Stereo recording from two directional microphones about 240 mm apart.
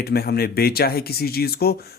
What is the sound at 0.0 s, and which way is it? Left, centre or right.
Speech, left.